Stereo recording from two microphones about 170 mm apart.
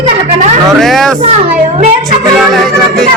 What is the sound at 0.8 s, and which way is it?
Speech, centre (ahead or behind).